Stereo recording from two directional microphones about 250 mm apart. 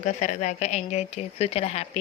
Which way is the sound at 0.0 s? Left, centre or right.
Left.